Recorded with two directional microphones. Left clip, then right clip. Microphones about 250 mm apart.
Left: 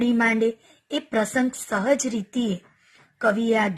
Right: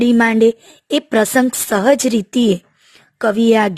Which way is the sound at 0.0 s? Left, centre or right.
Right.